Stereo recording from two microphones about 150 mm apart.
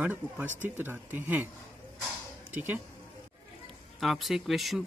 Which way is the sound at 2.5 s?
15° right (ahead or behind).